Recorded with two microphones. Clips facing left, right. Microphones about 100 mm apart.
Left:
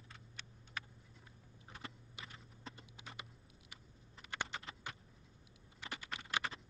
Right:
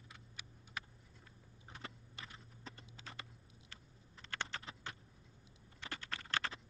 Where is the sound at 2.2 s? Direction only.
15° left (ahead or behind).